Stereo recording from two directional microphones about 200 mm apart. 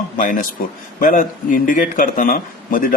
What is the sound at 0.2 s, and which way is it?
A man's voice, 40° left (ahead or behind).